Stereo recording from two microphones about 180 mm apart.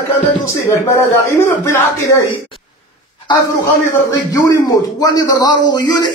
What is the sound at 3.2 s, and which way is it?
Speech, 20° left (ahead or behind).